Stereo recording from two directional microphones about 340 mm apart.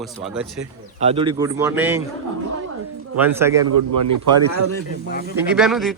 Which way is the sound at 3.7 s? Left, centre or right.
Right.